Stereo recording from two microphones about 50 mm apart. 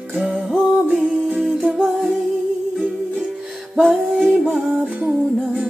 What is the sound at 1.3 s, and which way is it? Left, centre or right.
Music, centre.